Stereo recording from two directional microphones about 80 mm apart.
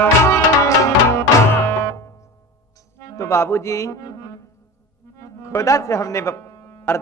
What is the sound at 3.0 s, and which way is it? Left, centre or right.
Music, left.